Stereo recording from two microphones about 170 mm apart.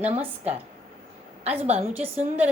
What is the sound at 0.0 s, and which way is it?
Music, 35° right (ahead or behind).